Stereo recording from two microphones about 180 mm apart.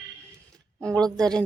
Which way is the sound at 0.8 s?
5° left (ahead or behind).